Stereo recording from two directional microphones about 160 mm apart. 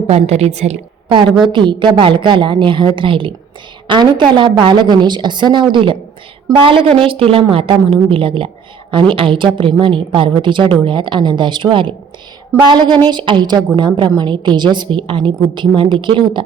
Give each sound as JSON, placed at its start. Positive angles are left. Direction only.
{"t": 0.1, "sound": "a woman's voice", "side_deg": -40}
{"t": 1.5, "sound": "a woman's voice", "side_deg": -30}